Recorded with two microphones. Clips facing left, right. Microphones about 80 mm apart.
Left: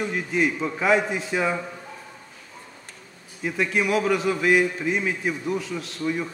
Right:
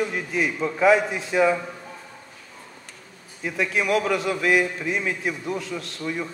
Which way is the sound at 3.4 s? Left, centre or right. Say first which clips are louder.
Even; centre.